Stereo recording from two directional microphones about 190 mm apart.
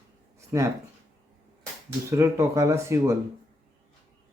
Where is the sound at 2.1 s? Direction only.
15° right (ahead or behind).